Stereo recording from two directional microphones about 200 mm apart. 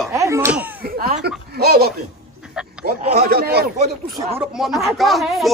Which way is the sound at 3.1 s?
50° right (ahead or behind).